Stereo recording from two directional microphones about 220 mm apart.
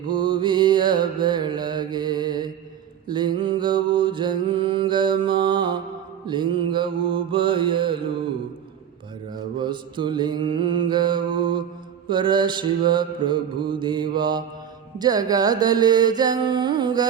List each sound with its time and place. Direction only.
0.1 s mantra: 20° right (ahead or behind)
9.3 s mantra: 20° right (ahead or behind)